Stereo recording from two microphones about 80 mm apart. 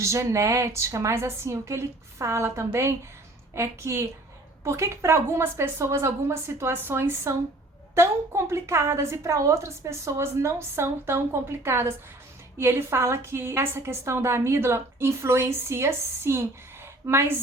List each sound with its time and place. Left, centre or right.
0.0 s a woman's voice: right